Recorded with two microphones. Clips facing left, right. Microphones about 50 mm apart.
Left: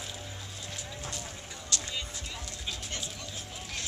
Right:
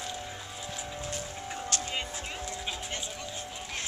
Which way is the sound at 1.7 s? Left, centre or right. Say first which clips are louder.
Right 1 dB; right.